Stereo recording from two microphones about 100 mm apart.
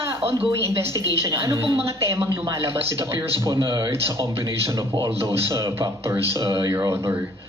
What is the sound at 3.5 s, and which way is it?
Speech, 50° right (ahead or behind).